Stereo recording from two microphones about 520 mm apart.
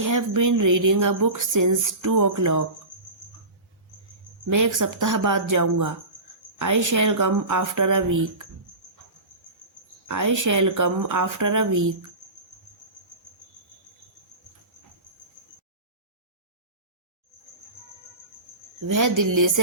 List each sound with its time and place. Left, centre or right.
0.0 s speech: right
4.4 s speech: right
10.1 s speech: right
18.9 s speech: right